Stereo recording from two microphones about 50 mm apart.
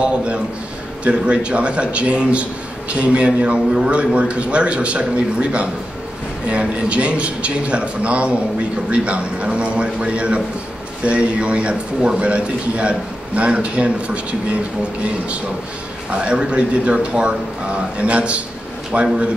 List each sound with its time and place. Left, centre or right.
1.0 s speech: right
16.1 s speech: right